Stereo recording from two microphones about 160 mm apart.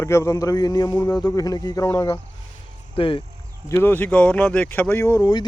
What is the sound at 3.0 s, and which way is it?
Speech, 35° left (ahead or behind).